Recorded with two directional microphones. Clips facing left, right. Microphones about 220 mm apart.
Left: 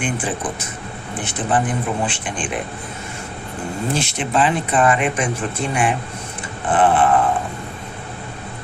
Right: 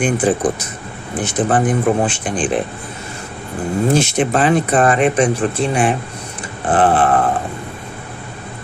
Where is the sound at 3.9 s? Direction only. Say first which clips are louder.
Right 5 dB; 45° right (ahead or behind).